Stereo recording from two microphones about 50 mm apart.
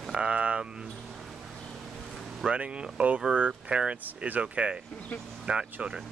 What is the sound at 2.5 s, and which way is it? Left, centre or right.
Speech, right.